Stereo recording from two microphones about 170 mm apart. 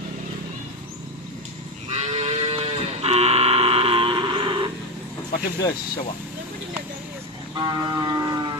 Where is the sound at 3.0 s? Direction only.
40° right (ahead or behind).